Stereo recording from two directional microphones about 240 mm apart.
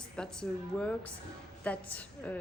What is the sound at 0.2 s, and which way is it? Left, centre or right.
A woman's voice, centre.